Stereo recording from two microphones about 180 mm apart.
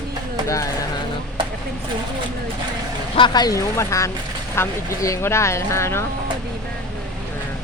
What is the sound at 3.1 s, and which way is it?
Speech, 25° left (ahead or behind).